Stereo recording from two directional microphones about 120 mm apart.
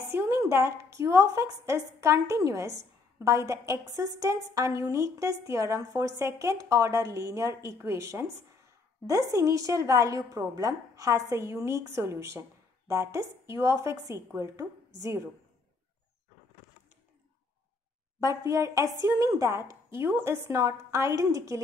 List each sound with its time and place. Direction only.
0.1 s a woman's voice: 20° right (ahead or behind)
18.2 s a woman's voice: 25° right (ahead or behind)